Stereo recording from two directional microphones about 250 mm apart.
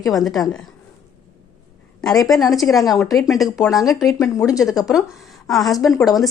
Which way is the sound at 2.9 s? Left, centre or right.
Centre.